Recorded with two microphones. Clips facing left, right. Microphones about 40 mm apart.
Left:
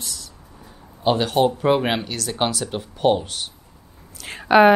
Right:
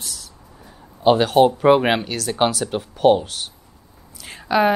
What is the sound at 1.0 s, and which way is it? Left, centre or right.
Speech, centre.